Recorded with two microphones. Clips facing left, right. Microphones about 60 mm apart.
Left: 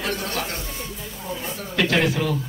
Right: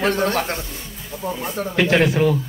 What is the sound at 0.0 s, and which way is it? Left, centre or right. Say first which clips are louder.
Speech: right 7 dB; right.